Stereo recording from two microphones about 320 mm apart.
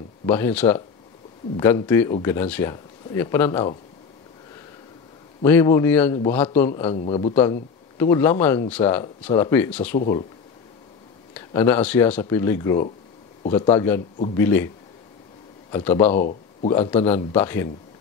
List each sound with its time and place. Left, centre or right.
0.3 s speech: centre
5.4 s a man's voice: centre
11.3 s speech: centre
15.7 s speech: centre
16.2 s speech: left